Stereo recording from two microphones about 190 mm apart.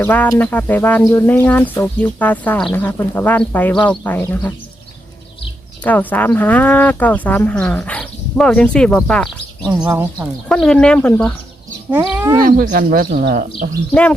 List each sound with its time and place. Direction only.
0.0 s speech: 10° left (ahead or behind)
5.8 s speech: 10° left (ahead or behind)
9.9 s speech: 10° right (ahead or behind)
10.5 s speech: 5° left (ahead or behind)
11.9 s speech: 10° right (ahead or behind)
12.4 s speech: 50° right (ahead or behind)